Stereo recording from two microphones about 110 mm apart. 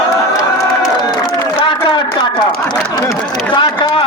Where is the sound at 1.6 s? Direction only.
50° left (ahead or behind).